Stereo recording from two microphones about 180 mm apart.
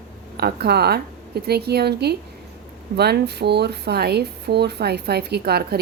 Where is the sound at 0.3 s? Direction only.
60° right (ahead or behind).